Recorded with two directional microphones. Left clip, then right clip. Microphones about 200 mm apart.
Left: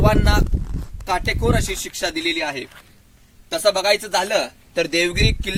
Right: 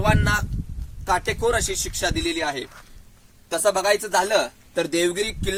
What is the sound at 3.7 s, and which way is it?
Speech, 35° left (ahead or behind).